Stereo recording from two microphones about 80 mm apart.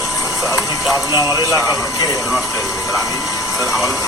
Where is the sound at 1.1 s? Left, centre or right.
Right.